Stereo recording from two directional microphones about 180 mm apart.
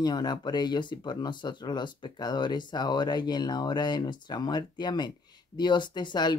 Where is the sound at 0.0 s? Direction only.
25° left (ahead or behind).